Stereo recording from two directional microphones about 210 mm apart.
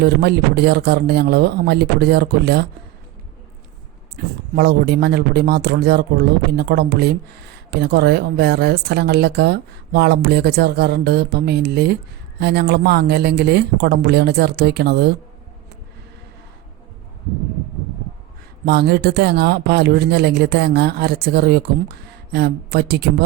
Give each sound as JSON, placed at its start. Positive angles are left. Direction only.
{"t": 0.0, "sound": "speech", "side_deg": -50}
{"t": 4.2, "sound": "speech", "side_deg": -45}
{"t": 18.6, "sound": "speech", "side_deg": -50}